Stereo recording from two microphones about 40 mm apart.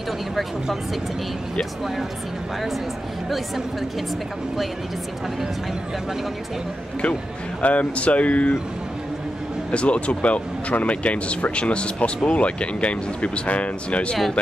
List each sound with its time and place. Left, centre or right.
7.6 s speech: left
9.7 s speech: left